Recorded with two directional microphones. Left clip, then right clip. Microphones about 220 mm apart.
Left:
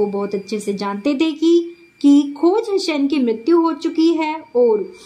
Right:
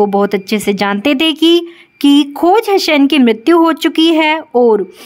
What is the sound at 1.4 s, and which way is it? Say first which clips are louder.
Speech: right 3 dB; 60° right (ahead or behind).